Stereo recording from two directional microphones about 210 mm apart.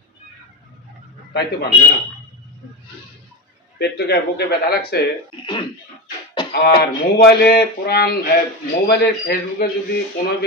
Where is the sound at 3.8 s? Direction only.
50° left (ahead or behind).